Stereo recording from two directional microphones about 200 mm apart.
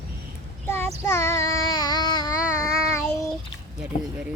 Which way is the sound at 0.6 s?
10° left (ahead or behind).